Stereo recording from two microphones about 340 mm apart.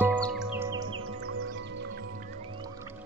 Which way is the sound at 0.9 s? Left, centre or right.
Right.